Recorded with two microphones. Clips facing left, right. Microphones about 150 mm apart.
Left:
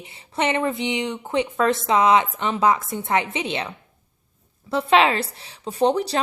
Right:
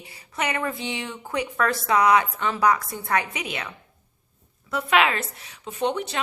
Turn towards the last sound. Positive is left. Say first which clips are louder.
# left 6 dB
turn(degrees=35)  # may be behind; listen again after turning